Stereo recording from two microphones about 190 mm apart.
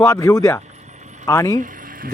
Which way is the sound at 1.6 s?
45° right (ahead or behind).